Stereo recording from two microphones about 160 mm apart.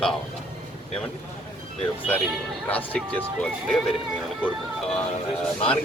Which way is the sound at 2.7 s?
10° left (ahead or behind).